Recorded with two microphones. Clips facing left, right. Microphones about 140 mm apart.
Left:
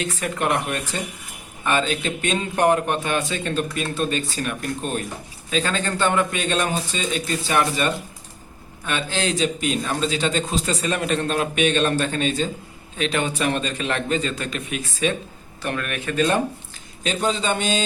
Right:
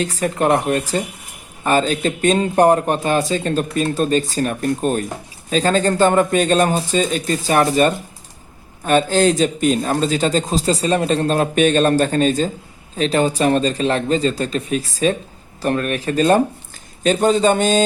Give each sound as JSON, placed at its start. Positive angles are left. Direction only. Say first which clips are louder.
{"t": 0.0, "sound": "a man's voice", "louder": "right 6 dB", "side_deg": -35}